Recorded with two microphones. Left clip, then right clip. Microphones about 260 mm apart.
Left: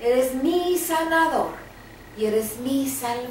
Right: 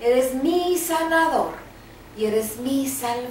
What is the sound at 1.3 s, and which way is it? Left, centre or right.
Speech, centre.